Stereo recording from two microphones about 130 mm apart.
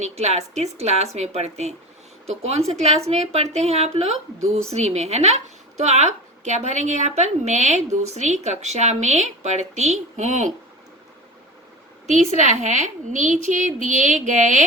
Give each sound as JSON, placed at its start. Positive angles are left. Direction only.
{"t": 0.0, "sound": "a woman's voice", "side_deg": -55}
{"t": 12.0, "sound": "a woman's voice", "side_deg": -65}